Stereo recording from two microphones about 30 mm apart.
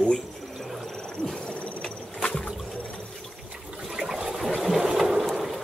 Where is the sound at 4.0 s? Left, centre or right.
Centre.